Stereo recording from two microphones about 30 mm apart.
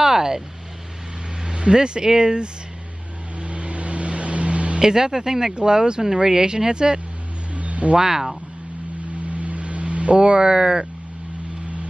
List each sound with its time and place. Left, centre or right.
0.0 s vehicle: centre
1.4 s speech: right
3.3 s vehicle: right
4.7 s speech: right
7.5 s a sound: right
7.9 s speech: centre
9.3 s a sound: right